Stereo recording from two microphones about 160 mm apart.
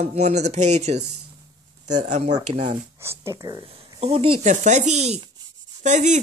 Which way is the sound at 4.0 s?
35° right (ahead or behind).